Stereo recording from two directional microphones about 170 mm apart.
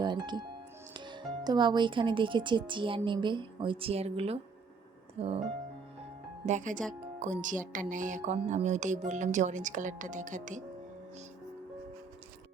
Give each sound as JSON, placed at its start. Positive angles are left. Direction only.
{"t": 0.0, "sound": "speech", "side_deg": -25}
{"t": 6.4, "sound": "speech", "side_deg": -45}